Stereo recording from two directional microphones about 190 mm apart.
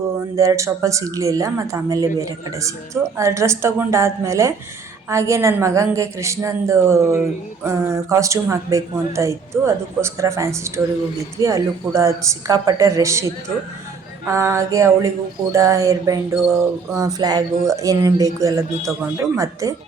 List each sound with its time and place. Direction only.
0.3 s a woman's voice: 15° right (ahead or behind)
14.3 s a woman's voice: 15° right (ahead or behind)